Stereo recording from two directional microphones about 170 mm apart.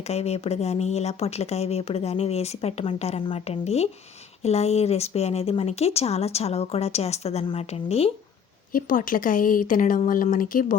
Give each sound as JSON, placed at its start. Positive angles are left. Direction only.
{"t": 0.1, "sound": "speech", "side_deg": 40}
{"t": 8.7, "sound": "speech", "side_deg": 55}